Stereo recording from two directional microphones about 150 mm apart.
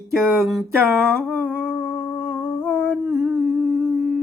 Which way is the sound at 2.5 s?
10° left (ahead or behind).